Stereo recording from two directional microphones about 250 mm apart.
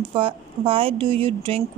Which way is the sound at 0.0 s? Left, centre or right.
Centre.